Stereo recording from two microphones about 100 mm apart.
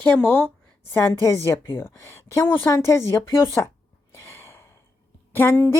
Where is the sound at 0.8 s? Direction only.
25° left (ahead or behind).